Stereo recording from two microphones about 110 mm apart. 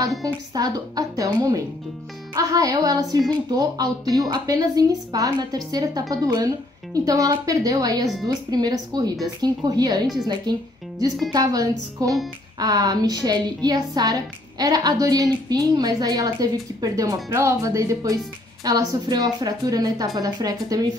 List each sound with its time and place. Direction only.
0.2 s a woman's voice: 35° right (ahead or behind)